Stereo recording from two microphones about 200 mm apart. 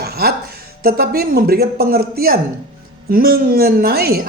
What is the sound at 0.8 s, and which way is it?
A man's voice, 50° right (ahead or behind).